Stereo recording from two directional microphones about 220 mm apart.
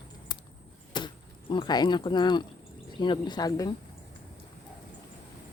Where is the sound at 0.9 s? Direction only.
20° left (ahead or behind).